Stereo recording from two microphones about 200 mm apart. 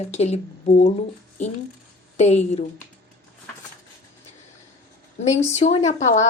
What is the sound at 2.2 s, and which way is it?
Speech, 35° left (ahead or behind).